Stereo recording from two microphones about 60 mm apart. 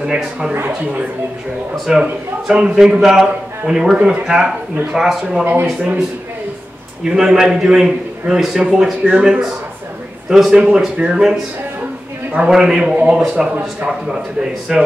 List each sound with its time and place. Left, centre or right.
0.0 s a man's voice: centre
1.9 s a man's voice: centre
5.4 s speech: right
7.1 s a man's voice: centre
10.3 s a man's voice: centre
12.4 s a man's voice: centre
13.8 s a man's voice: centre